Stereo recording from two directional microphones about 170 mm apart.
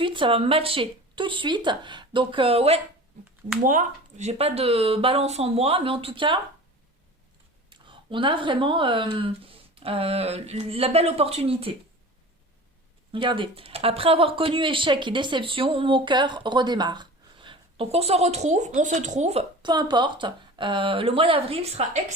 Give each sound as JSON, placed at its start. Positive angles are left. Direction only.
{"t": 0.0, "sound": "speech", "side_deg": -30}
{"t": 3.6, "sound": "speech", "side_deg": -50}
{"t": 7.7, "sound": "speech", "side_deg": -30}
{"t": 13.1, "sound": "speech", "side_deg": -30}
{"t": 19.7, "sound": "speech", "side_deg": -25}